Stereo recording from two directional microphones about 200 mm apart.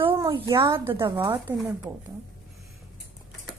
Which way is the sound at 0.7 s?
10° right (ahead or behind).